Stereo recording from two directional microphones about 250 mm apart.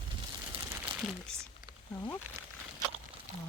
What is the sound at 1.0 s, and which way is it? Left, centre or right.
Speech, centre.